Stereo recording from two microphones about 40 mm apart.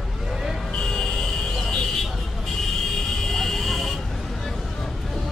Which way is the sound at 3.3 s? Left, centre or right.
Centre.